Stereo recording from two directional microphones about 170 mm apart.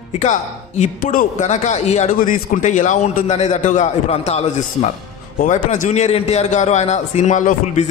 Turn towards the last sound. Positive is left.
turn(degrees=45)  # may be behind; listen again after turning